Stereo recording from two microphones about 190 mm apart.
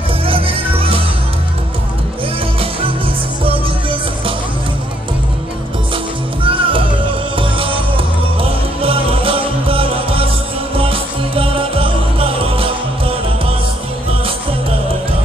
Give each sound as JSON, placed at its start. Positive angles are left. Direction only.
{"t": 0.3, "sound": "music", "side_deg": -30}
{"t": 6.4, "sound": "music", "side_deg": -25}